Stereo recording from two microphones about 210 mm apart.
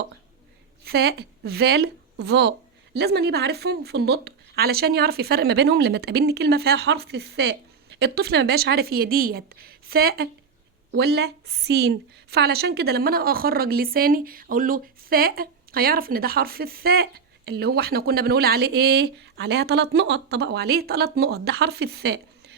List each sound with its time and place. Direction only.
0.9 s a woman's voice: 50° right (ahead or behind)